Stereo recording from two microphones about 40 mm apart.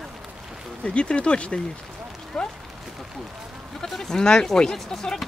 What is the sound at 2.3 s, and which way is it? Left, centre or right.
Speech, centre.